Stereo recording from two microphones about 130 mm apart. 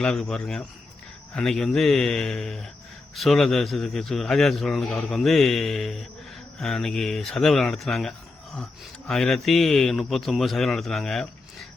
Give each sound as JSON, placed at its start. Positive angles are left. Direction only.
{"t": 0.0, "sound": "a man's voice", "side_deg": 5}